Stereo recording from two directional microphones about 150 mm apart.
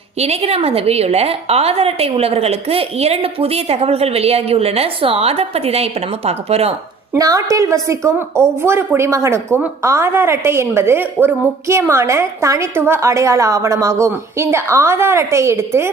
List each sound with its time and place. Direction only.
0.2 s a woman's voice: 40° right (ahead or behind)
7.1 s a woman's voice: 25° right (ahead or behind)